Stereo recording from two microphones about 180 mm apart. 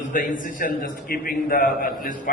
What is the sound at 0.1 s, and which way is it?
A man's voice, 50° left (ahead or behind).